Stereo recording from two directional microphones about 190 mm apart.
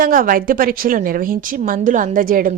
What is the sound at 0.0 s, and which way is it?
A woman's voice, 45° right (ahead or behind).